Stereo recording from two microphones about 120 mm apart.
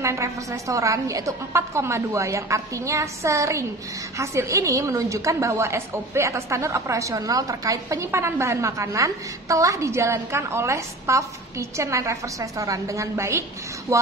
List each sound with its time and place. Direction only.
0.0 s a woman's voice: 25° right (ahead or behind)